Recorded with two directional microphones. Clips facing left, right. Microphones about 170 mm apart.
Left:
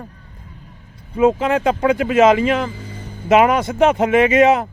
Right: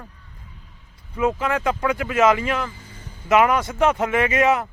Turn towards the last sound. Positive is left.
turn(degrees=20)  # may be behind; listen again after turning